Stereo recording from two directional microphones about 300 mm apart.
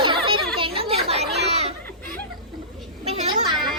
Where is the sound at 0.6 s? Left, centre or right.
Centre.